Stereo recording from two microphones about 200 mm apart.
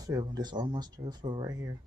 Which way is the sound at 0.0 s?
20° right (ahead or behind).